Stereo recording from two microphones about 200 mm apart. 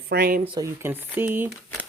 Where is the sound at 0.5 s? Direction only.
15° right (ahead or behind).